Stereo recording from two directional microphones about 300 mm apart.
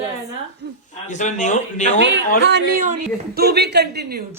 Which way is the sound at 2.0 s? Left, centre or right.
Right.